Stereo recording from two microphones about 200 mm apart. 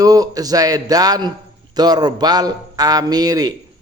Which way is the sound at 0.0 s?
20° right (ahead or behind).